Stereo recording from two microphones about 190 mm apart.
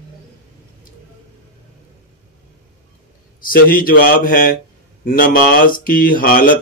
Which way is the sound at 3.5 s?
50° left (ahead or behind).